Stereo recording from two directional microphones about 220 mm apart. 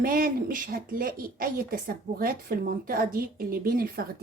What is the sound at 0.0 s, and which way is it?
A woman's voice, 40° right (ahead or behind).